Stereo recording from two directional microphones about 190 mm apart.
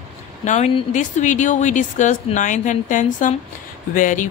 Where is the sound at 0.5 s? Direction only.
40° left (ahead or behind).